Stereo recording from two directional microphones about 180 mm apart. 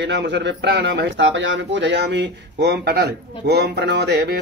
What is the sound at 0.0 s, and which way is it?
A man's voice, 75° right (ahead or behind).